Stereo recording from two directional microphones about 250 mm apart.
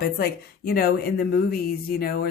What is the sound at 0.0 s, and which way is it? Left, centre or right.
A woman's voice, left.